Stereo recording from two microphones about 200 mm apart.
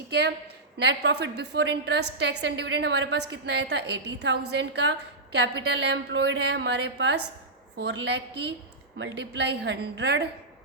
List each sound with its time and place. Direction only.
0.1 s a woman's voice: 55° right (ahead or behind)